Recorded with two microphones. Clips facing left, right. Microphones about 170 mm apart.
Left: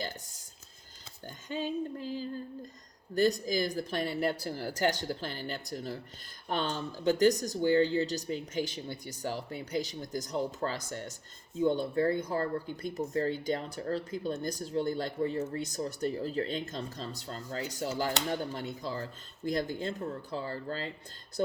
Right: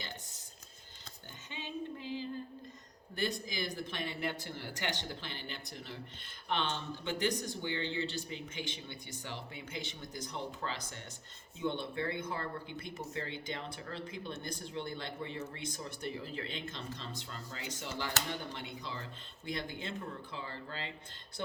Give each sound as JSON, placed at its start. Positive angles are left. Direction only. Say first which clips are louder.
{"t": 1.5, "sound": "female singing", "louder": "left 8 dB", "side_deg": 40}
{"t": 3.2, "sound": "speech", "louder": "left 10 dB", "side_deg": 45}